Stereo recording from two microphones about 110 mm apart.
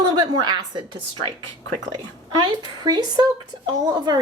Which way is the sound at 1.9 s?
40° right (ahead or behind).